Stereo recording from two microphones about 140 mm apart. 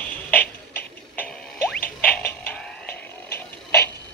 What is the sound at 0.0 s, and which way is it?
Music, 10° left (ahead or behind).